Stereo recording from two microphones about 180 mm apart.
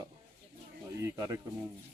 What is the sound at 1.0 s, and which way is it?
Speech, 15° right (ahead or behind).